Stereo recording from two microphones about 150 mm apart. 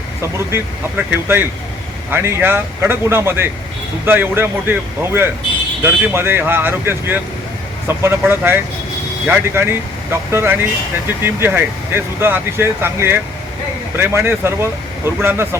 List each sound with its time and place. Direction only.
0.2 s speech: 15° right (ahead or behind)